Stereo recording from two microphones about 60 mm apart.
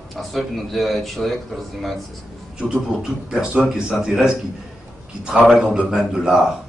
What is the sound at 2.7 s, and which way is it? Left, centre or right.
A man's voice, centre.